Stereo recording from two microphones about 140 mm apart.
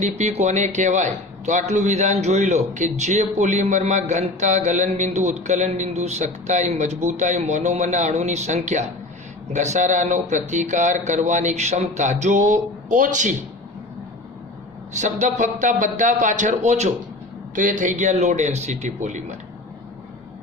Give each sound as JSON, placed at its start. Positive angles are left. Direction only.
{"t": 0.0, "sound": "a man's voice", "side_deg": -55}
{"t": 14.9, "sound": "a man's voice", "side_deg": -60}
{"t": 17.5, "sound": "a man's voice", "side_deg": -70}